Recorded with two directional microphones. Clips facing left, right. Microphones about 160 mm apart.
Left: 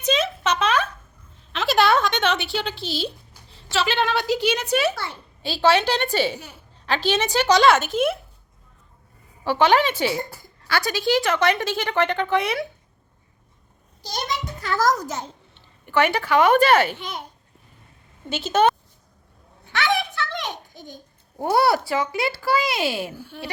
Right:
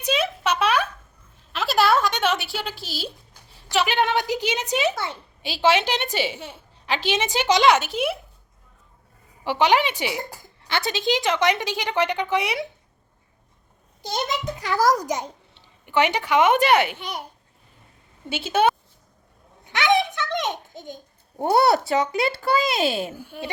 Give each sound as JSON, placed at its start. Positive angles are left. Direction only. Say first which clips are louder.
{"t": 0.0, "sound": "a sound", "louder": "left 1 dB", "side_deg": -10}
{"t": 3.7, "sound": "a woman's voice", "louder": "right 1 dB", "side_deg": -15}
{"t": 9.4, "sound": "a woman's voice", "louder": "left 2 dB", "side_deg": -15}
{"t": 14.6, "sound": "a woman's voice", "louder": "right 1 dB", "side_deg": -10}
{"t": 18.3, "sound": "a woman's voice", "louder": "left 1 dB", "side_deg": -10}
{"t": 19.6, "sound": "a sound", "louder": "right 3 dB", "side_deg": -15}
{"t": 21.4, "sound": "a child's voice", "louder": "right 1 dB", "side_deg": -25}